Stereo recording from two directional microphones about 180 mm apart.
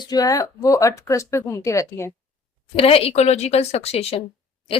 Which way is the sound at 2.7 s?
35° left (ahead or behind).